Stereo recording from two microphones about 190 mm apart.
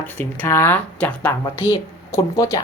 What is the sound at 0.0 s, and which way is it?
A woman's voice, 10° left (ahead or behind).